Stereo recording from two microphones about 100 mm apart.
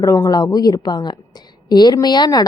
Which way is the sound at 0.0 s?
40° left (ahead or behind).